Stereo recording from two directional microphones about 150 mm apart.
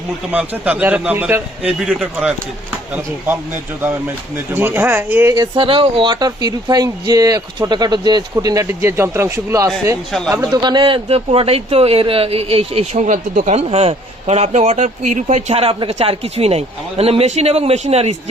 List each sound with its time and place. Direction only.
0.3 s a man's voice: 10° right (ahead or behind)
5.4 s speech: 35° right (ahead or behind)